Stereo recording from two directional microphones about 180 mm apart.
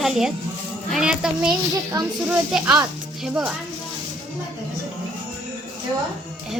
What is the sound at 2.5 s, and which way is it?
Speech, 5° right (ahead or behind).